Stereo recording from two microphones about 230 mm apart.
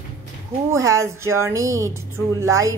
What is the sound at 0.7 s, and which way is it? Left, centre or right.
A woman's voice, centre.